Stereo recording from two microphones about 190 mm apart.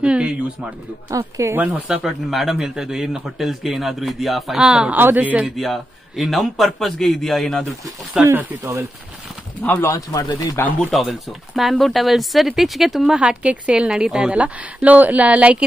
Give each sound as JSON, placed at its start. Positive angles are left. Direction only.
{"t": 0.0, "sound": "a sound", "side_deg": -5}
{"t": 1.1, "sound": "speech", "side_deg": -15}
{"t": 9.6, "sound": "speech", "side_deg": 10}
{"t": 10.8, "sound": "speech", "side_deg": 0}